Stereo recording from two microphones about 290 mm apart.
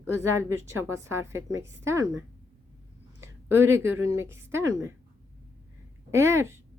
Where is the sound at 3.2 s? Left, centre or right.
Centre.